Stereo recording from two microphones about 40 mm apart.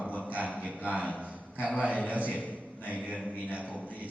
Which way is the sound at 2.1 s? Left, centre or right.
Right.